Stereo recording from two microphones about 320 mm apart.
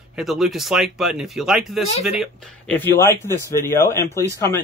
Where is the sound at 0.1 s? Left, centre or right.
Centre.